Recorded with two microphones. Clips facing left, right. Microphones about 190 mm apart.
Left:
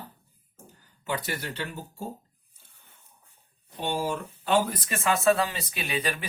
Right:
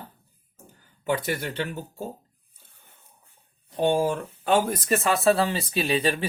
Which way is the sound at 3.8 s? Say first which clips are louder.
Right 7 dB; 50° right (ahead or behind).